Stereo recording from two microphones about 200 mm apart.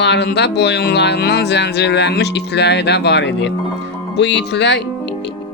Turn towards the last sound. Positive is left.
turn(degrees=60)  # may be behind; listen again after turning